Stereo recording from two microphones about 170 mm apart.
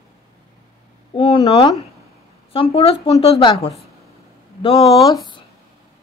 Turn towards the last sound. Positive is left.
turn(degrees=20)  # may be behind; listen again after turning